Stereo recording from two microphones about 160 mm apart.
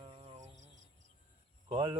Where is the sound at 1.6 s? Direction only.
35° right (ahead or behind).